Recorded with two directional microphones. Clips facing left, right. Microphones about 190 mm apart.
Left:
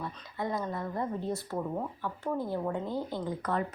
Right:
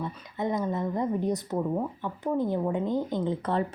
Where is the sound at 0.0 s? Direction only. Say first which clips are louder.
Right 4 dB; 20° right (ahead or behind).